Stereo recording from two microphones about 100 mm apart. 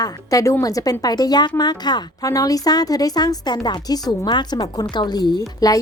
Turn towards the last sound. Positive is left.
turn(degrees=35)  # may be behind; listen again after turning